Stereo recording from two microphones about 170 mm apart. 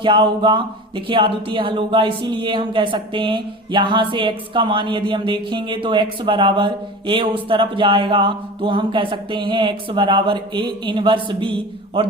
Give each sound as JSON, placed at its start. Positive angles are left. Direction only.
{"t": 0.0, "sound": "speech", "side_deg": -30}